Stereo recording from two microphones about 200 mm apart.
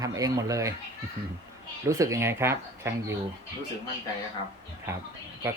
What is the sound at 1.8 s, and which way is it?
Speech, 15° right (ahead or behind).